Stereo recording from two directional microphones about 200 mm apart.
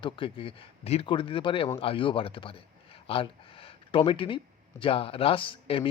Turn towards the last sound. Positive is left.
turn(degrees=25)  # may be behind; listen again after turning